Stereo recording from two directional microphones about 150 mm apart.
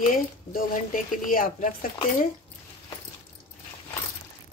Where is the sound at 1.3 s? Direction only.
70° left (ahead or behind).